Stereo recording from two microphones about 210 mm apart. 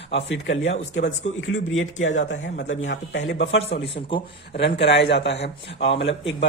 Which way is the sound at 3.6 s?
30° left (ahead or behind).